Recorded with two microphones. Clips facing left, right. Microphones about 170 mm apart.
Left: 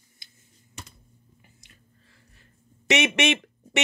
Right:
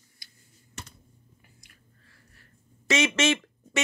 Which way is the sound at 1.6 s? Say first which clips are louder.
Left 2 dB; 20° left (ahead or behind).